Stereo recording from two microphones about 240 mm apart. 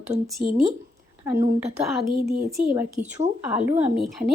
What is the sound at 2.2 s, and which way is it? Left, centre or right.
Speech, right.